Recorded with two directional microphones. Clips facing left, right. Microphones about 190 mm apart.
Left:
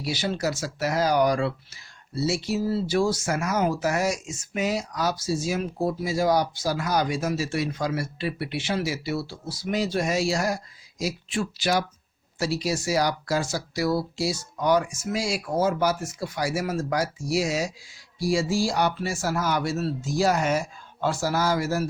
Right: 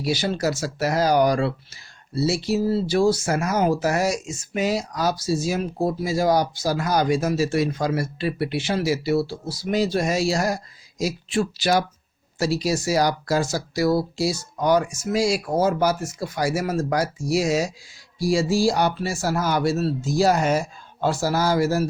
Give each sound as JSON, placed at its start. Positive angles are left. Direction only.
{"t": 0.0, "sound": "speech", "side_deg": -40}